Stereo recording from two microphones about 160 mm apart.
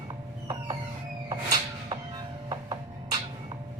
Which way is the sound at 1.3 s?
25° right (ahead or behind).